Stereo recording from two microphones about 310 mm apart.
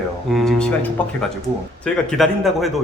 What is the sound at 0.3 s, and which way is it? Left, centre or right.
Speech, centre.